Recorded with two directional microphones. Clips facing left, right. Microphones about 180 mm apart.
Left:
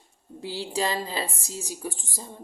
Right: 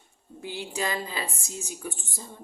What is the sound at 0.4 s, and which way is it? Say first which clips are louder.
Speech: left 3 dB; 30° left (ahead or behind).